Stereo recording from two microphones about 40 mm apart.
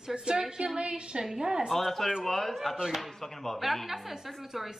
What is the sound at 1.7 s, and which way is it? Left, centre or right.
A woman's voice, centre.